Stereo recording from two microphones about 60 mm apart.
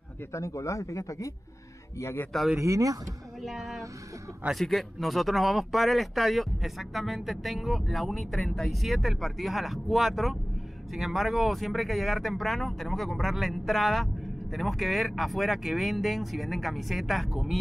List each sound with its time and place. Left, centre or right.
0.3 s speech: left
2.6 s speech: right
3.4 s speech: centre